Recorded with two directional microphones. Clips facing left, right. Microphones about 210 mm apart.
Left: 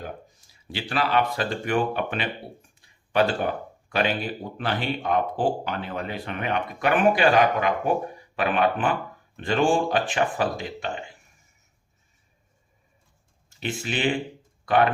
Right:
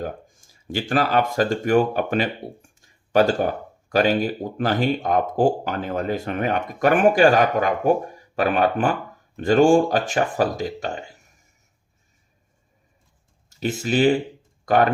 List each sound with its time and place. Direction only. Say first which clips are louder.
0.0 s speech: right 6 dB; 45° right (ahead or behind)
13.5 s speech: right 7 dB; 40° right (ahead or behind)
14.6 s typing: right 3 dB; 45° right (ahead or behind)